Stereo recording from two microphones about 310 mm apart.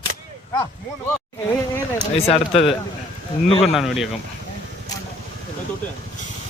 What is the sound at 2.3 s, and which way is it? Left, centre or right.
A man's voice, centre.